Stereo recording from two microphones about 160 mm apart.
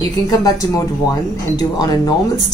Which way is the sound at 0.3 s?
20° left (ahead or behind).